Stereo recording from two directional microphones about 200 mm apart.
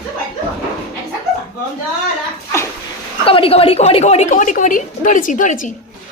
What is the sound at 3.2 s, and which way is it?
A woman's voice, 25° left (ahead or behind).